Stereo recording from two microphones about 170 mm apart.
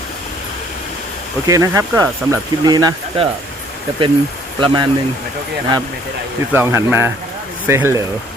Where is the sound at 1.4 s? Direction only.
20° right (ahead or behind).